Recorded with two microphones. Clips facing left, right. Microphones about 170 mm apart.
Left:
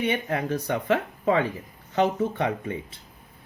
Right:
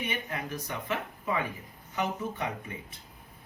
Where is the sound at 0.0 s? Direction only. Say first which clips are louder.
Left 9 dB; 65° left (ahead or behind).